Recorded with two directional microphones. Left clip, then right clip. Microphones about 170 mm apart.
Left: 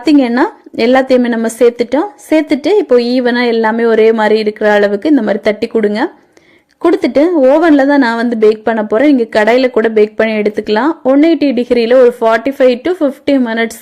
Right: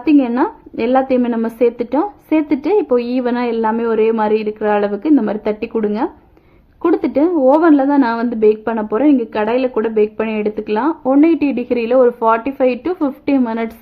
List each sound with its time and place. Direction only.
0.0 s a woman's voice: 25° left (ahead or behind)